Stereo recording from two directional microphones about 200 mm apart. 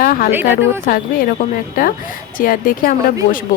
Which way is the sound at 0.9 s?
45° left (ahead or behind).